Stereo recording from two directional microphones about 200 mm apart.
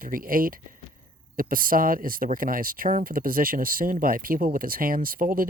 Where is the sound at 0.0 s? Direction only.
45° right (ahead or behind).